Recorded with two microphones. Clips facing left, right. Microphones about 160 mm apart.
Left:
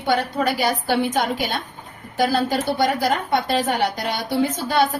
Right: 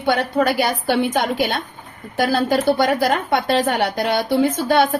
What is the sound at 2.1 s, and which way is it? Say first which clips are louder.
A woman's voice: right 2 dB; 60° right (ahead or behind).